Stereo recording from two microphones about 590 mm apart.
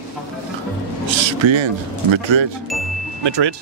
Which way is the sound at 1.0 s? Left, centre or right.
Right.